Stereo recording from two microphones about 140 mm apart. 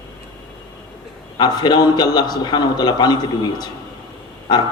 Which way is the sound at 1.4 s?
30° left (ahead or behind).